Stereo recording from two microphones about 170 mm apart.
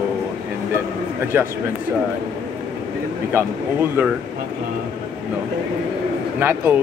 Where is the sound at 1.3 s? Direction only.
10° right (ahead or behind).